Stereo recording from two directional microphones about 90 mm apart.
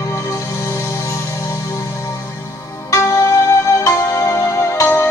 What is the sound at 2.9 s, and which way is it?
Music, 35° left (ahead or behind).